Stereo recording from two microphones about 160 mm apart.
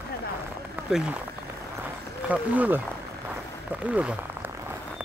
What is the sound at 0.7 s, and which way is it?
Speech, 10° right (ahead or behind).